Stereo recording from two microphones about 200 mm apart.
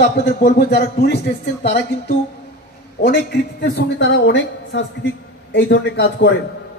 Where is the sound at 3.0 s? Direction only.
55° left (ahead or behind).